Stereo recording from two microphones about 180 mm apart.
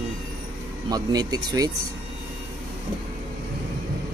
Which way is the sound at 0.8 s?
20° right (ahead or behind).